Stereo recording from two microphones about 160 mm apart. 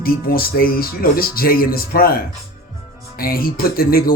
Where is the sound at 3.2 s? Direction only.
65° left (ahead or behind).